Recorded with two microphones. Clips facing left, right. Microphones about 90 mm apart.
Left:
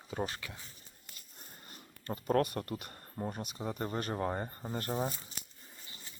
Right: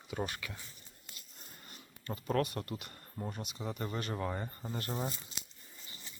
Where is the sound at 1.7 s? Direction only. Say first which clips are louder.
Left 2 dB; 35° left (ahead or behind).